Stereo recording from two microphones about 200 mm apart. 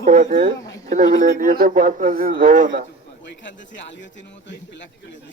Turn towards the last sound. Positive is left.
turn(degrees=65)  # may be behind; listen again after turning